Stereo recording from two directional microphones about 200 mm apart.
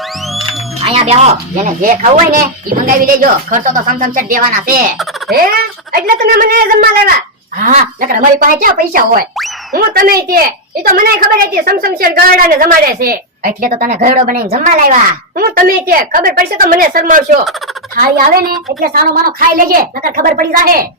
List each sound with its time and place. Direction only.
0.8 s a woman's voice: 30° right (ahead or behind)